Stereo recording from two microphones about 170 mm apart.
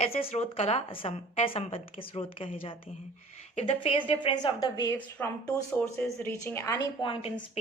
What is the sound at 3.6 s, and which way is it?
A woman's voice, 35° left (ahead or behind).